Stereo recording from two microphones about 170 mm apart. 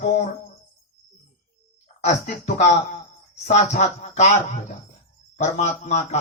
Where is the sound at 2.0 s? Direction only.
40° left (ahead or behind).